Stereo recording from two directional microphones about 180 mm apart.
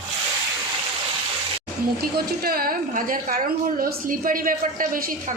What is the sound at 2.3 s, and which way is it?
A woman's voice, 55° right (ahead or behind).